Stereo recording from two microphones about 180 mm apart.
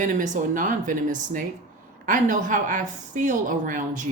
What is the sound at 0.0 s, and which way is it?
Speech, 45° right (ahead or behind).